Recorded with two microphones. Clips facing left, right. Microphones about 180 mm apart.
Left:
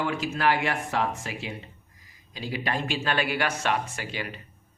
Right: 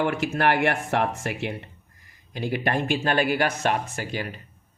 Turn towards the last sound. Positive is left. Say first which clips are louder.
# right 4 dB
turn(degrees=-45)  # may be behind; listen again after turning